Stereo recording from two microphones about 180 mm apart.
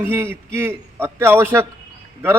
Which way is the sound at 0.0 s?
15° right (ahead or behind).